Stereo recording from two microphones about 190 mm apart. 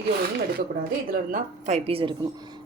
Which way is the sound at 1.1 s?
45° right (ahead or behind).